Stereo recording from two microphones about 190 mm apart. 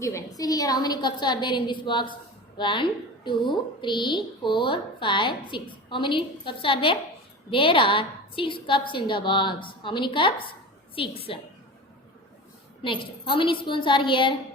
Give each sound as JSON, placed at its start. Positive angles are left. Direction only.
{"t": 0.0, "sound": "a woman's voice", "side_deg": 15}
{"t": 12.8, "sound": "a woman's voice", "side_deg": 25}